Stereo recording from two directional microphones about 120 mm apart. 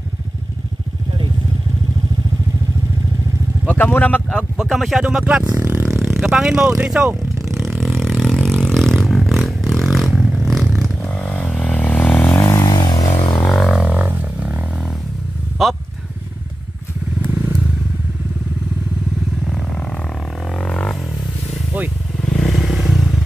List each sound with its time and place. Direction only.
3.6 s speech: 15° left (ahead or behind)
4.6 s speech: centre (ahead or behind)
5.4 s speech: 30° right (ahead or behind)
5.7 s a sound: 20° right (ahead or behind)
6.1 s speech: 5° right (ahead or behind)
7.8 s a sound: centre (ahead or behind)
11.1 s vehicle: 10° left (ahead or behind)
12.4 s vehicle: 30° left (ahead or behind)
13.6 s didgeridoo: 5° left (ahead or behind)
13.8 s a sound: 15° right (ahead or behind)
15.6 s speech: centre (ahead or behind)
17.3 s motorcycle: 15° right (ahead or behind)
20.5 s a sound: 5° left (ahead or behind)
22.2 s motorcycle: 5° left (ahead or behind)